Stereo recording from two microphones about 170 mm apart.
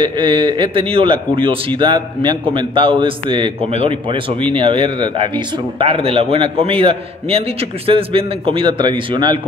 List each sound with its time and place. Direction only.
0.0 s a man's voice: 30° right (ahead or behind)